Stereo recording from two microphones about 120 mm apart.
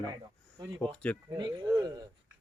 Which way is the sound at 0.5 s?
40° right (ahead or behind).